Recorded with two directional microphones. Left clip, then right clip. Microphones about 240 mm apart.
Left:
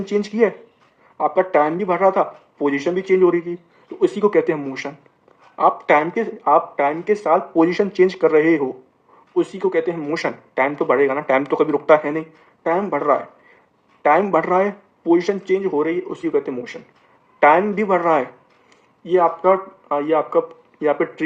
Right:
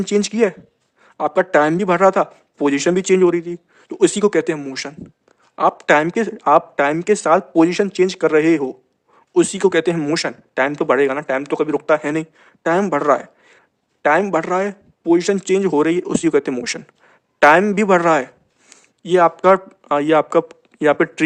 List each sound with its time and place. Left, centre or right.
0.0 s speech: right
3.9 s speech: right
9.3 s speech: right
12.0 s a man's voice: right